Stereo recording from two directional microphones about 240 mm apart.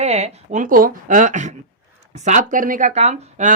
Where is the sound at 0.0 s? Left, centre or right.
Right.